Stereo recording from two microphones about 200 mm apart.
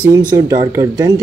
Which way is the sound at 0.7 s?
15° right (ahead or behind).